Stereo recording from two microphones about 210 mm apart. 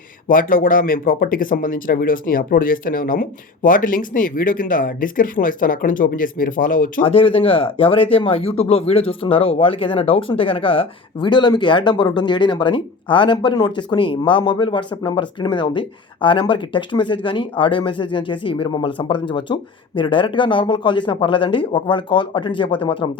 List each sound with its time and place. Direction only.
0.3 s speech: 40° left (ahead or behind)
7.0 s speech: 25° left (ahead or behind)